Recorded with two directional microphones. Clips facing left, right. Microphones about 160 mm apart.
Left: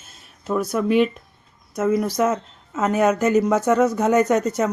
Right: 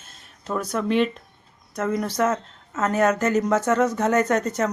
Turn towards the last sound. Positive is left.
turn(degrees=10)  # may be behind; listen again after turning